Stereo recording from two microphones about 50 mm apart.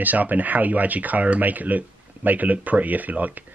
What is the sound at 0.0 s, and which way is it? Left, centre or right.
Speech, right.